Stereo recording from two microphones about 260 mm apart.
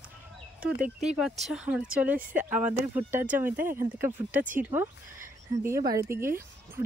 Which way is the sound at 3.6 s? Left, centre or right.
Right.